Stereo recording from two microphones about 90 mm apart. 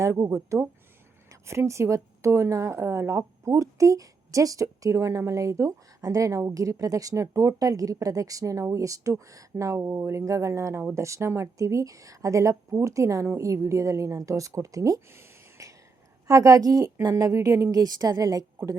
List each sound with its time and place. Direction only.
0.0 s a woman's voice: 35° right (ahead or behind)
15.1 s a sound: 30° right (ahead or behind)
16.2 s a woman's voice: 35° right (ahead or behind)